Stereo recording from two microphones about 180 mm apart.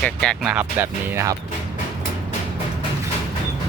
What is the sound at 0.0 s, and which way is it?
Speech, 5° left (ahead or behind).